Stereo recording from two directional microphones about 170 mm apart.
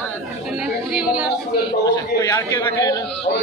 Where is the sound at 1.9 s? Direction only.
20° left (ahead or behind).